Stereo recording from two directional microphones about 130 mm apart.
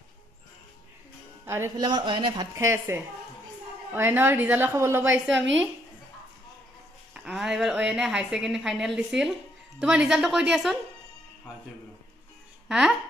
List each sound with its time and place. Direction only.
1.4 s speech: 20° right (ahead or behind)
1.8 s speech: 35° right (ahead or behind)
2.5 s a woman's voice: 20° right (ahead or behind)
5.2 s a woman's voice: 5° right (ahead or behind)
7.2 s a woman's voice: 5° right (ahead or behind)
12.6 s speech: 5° right (ahead or behind)